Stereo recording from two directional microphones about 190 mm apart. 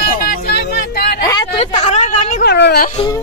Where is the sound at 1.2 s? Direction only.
20° left (ahead or behind).